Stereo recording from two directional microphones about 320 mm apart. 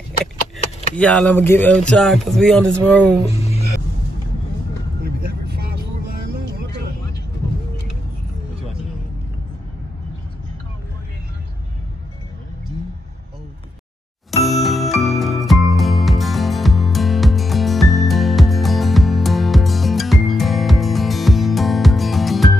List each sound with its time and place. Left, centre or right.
0.9 s speech: centre
3.3 s music: centre
5.0 s vehicle: right
14.4 s music: centre